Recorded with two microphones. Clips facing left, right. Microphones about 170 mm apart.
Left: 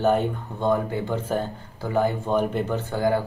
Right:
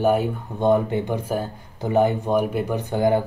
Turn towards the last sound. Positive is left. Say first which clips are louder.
# right 3 dB
turn(degrees=-20)  # may be behind; listen again after turning